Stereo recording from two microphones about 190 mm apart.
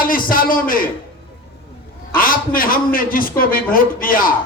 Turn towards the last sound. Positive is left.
turn(degrees=50)  # may be behind; listen again after turning